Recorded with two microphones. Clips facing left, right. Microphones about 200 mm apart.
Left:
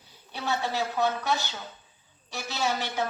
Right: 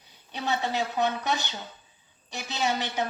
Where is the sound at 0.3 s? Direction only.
20° right (ahead or behind).